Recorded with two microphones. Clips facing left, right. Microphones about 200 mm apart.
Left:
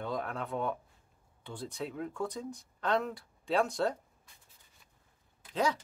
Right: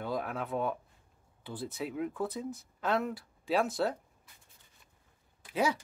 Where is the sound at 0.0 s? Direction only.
5° right (ahead or behind).